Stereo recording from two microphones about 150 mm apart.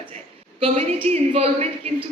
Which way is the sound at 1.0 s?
45° right (ahead or behind).